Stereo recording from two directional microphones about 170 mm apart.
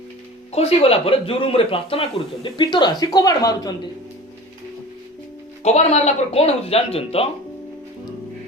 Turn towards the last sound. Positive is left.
turn(degrees=35)  # may be behind; listen again after turning